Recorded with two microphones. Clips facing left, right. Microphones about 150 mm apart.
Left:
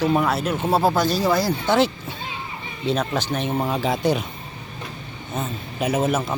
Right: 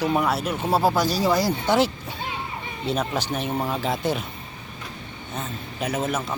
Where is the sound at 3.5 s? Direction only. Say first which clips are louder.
Left 3 dB; 5° left (ahead or behind).